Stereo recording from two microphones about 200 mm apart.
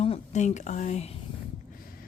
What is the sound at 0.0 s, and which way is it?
Speech, 35° left (ahead or behind).